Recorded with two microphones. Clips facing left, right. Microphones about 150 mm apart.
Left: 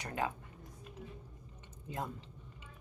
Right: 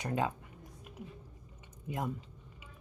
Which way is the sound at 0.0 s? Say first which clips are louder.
Right 4 dB; 20° right (ahead or behind).